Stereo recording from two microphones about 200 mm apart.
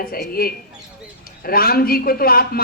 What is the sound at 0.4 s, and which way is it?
A man's voice, 50° left (ahead or behind).